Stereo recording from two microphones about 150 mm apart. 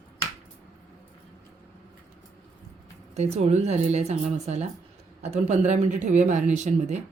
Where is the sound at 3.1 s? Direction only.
45° right (ahead or behind).